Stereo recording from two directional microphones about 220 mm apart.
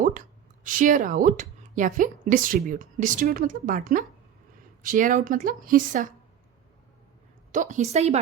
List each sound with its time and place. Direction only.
0.0 s a woman's voice: 35° right (ahead or behind)
7.5 s a woman's voice: 35° right (ahead or behind)